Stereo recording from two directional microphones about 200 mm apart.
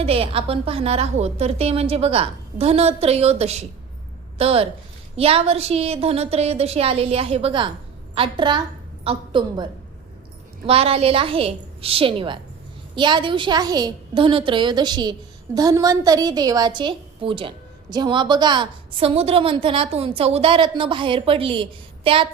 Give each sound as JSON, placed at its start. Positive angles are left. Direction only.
{"t": 0.0, "sound": "a woman's voice", "side_deg": -30}
{"t": 10.7, "sound": "a woman's voice", "side_deg": -30}